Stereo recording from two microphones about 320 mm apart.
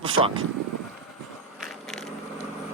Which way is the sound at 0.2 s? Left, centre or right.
Centre.